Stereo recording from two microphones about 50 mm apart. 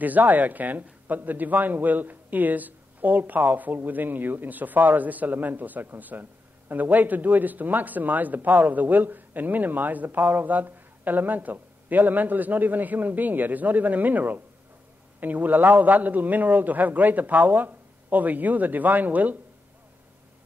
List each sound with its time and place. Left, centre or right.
0.0 s speech: right